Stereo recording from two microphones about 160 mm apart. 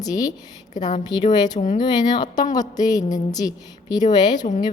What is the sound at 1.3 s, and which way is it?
Speech, 25° left (ahead or behind).